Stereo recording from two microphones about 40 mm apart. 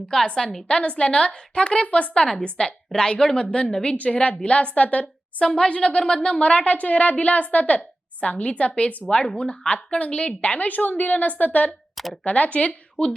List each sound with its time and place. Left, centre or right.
0.3 s a woman's voice: centre
0.7 s a woman's voice: left
2.2 s a woman's voice: centre
3.9 s a woman's voice: left
10.4 s a woman's voice: left
11.9 s speech: centre
12.2 s a woman's voice: left